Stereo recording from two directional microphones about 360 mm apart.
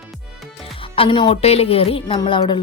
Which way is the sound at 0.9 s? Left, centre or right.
Centre.